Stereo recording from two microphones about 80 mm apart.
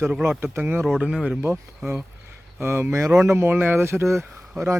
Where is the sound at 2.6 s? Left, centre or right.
Right.